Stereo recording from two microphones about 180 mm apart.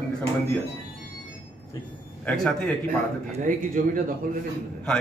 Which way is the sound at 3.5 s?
50° right (ahead or behind).